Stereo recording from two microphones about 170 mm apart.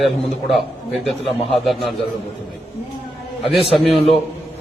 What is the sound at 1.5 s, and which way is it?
Speech, centre (ahead or behind).